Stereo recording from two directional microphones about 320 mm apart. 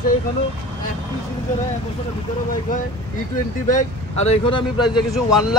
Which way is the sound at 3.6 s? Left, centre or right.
Left.